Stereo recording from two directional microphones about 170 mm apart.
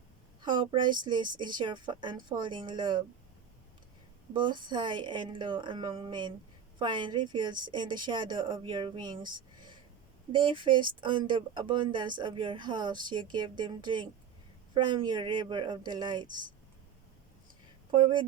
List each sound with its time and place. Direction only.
0.4 s a woman's voice: 30° right (ahead or behind)
4.4 s a woman's voice: 25° right (ahead or behind)
17.9 s a woman's voice: 30° right (ahead or behind)